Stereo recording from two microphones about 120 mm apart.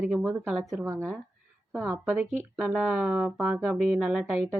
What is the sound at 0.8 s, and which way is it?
Speech, 25° right (ahead or behind).